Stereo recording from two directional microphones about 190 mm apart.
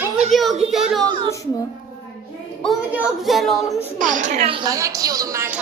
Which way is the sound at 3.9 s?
45° right (ahead or behind).